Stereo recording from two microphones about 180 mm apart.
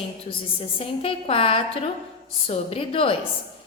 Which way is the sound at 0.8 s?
30° left (ahead or behind).